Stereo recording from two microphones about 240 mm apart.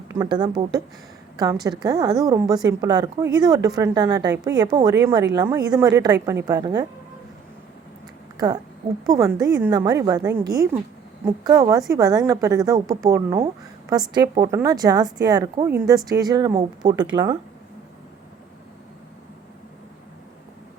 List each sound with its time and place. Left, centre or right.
0.1 s a woman's voice: centre
1.8 s a woman's voice: centre
8.4 s a woman's voice: centre